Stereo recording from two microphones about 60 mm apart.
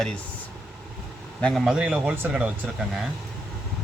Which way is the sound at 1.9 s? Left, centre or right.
Right.